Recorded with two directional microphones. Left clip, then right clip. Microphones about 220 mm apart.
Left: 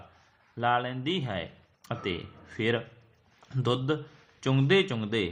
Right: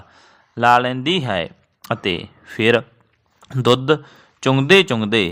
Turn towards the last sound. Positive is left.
turn(degrees=-45)  # may be behind; listen again after turning